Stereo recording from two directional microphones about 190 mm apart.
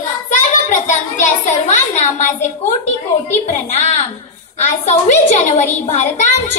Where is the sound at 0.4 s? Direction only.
40° left (ahead or behind).